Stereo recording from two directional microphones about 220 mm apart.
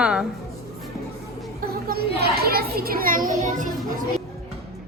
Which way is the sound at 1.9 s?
45° right (ahead or behind).